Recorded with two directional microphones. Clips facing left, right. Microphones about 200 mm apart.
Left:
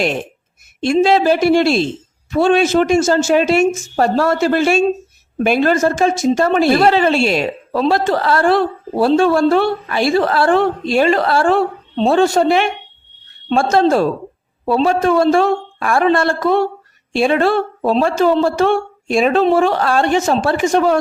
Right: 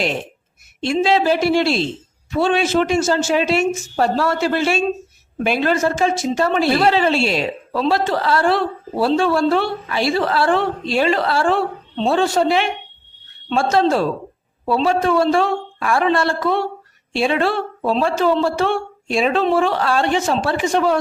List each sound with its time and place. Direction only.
0.8 s a woman's voice: 45° left (ahead or behind)